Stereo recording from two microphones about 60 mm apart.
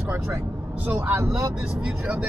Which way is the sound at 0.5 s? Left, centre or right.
Right.